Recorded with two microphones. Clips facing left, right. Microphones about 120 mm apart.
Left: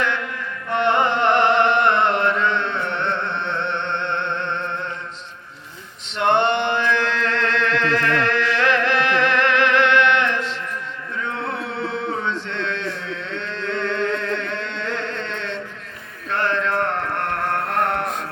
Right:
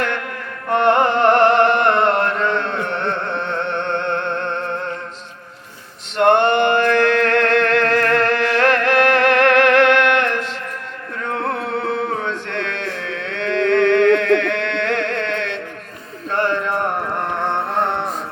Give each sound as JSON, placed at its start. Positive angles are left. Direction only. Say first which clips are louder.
{"t": 0.0, "sound": "carnatic music", "louder": "right 1 dB", "side_deg": -50}
{"t": 0.7, "sound": "chant", "louder": "right 4 dB", "side_deg": -45}
{"t": 6.1, "sound": "music", "louder": "right 5 dB", "side_deg": -50}
{"t": 11.2, "sound": "a sound", "louder": "right 4 dB", "side_deg": -50}